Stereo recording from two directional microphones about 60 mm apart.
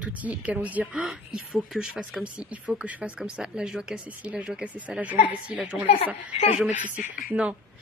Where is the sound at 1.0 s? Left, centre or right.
Centre.